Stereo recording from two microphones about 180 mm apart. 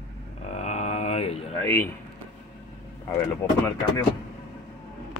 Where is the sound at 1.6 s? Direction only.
15° left (ahead or behind).